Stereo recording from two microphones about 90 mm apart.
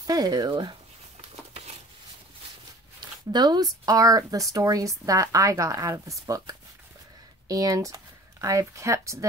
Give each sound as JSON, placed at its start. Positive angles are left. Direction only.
{"t": 0.0, "sound": "speech", "side_deg": -45}
{"t": 0.5, "sound": "speech", "side_deg": -60}
{"t": 3.0, "sound": "speech", "side_deg": -55}